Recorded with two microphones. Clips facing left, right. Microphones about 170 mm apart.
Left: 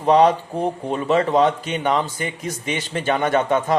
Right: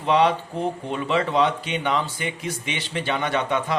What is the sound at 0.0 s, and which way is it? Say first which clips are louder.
Speech: left 5 dB; 40° left (ahead or behind).